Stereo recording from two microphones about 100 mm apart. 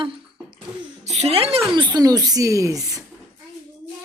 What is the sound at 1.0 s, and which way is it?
Speech, 90° right.